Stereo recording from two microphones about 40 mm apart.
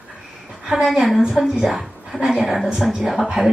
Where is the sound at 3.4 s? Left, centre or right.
Centre.